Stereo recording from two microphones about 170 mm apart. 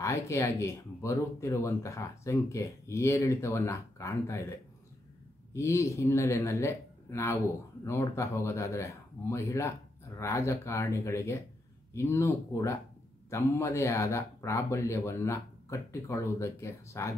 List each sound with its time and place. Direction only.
0.0 s speech: 15° left (ahead or behind)